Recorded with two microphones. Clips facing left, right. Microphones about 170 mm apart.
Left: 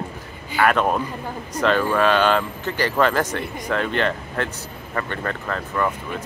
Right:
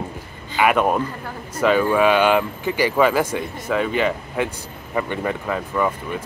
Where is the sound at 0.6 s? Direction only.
10° right (ahead or behind).